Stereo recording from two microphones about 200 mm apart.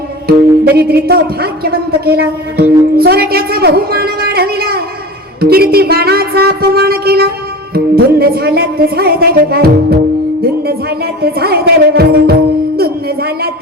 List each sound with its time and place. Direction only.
0.3 s a woman's voice: 50° right (ahead or behind)